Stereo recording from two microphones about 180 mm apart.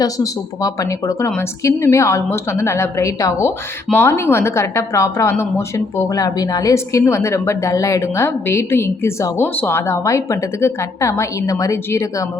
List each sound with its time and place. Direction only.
0.0 s a woman's voice: 20° left (ahead or behind)